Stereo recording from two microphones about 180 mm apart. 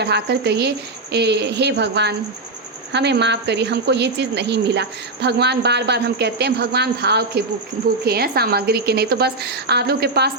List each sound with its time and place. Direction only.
0.0 s a woman's voice: 65° right (ahead or behind)